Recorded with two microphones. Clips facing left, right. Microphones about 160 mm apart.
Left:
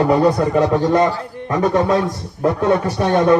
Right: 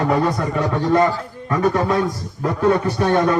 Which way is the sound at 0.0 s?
30° left (ahead or behind).